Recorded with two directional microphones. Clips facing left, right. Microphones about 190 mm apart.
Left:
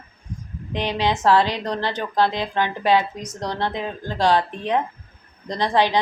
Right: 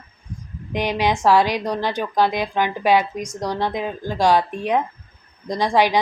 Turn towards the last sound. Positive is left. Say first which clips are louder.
# right 2 dB
turn(degrees=-10)  # may be behind; listen again after turning